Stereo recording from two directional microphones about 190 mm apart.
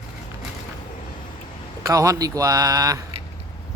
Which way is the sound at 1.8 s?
20° right (ahead or behind).